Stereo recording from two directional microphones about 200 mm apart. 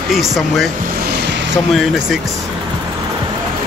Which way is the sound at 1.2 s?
65° right (ahead or behind).